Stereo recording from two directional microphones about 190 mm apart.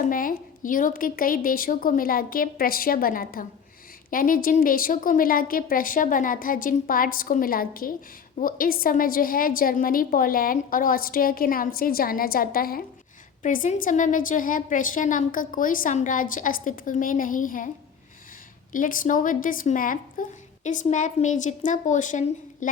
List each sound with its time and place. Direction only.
0.0 s a woman's voice: 45° left (ahead or behind)
18.7 s a woman's voice: 45° left (ahead or behind)